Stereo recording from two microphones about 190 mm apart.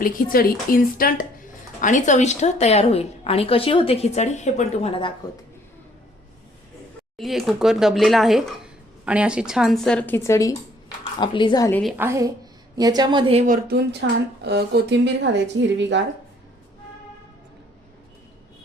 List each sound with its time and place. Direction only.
0.0 s speech: 50° left (ahead or behind); by 5.1 s 30° left (ahead or behind)
7.2 s a woman's voice: centre (ahead or behind); by 11.7 s 20° left (ahead or behind)
11.7 s speech: centre (ahead or behind)
11.9 s a woman's voice: 15° right (ahead or behind)
13.4 s speech: 45° right (ahead or behind)
14.0 s speech: 60° right (ahead or behind)